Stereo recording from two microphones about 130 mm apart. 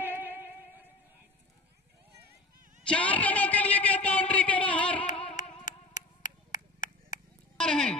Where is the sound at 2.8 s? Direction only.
10° left (ahead or behind).